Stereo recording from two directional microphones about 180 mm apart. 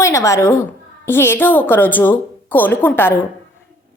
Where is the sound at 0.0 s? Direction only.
15° left (ahead or behind).